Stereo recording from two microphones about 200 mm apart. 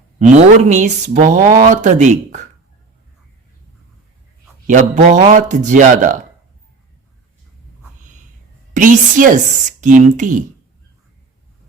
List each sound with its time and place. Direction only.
0.2 s speech: 35° right (ahead or behind)
4.6 s speech: 40° right (ahead or behind)
8.7 s speech: 40° right (ahead or behind)